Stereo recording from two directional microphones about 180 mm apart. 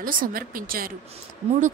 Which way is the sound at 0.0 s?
55° right (ahead or behind).